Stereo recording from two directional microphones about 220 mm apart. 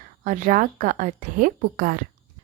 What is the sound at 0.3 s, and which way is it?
A woman's voice, 35° right (ahead or behind).